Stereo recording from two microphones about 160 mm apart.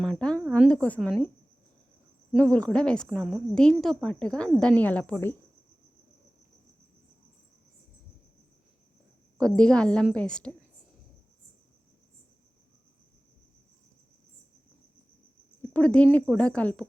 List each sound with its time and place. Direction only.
0.0 s speech: 5° left (ahead or behind)
2.4 s a woman's voice: 5° left (ahead or behind)
9.4 s a woman's voice: 5° left (ahead or behind)
15.7 s speech: 10° left (ahead or behind)